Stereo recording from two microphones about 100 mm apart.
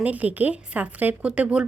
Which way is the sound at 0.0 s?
15° right (ahead or behind).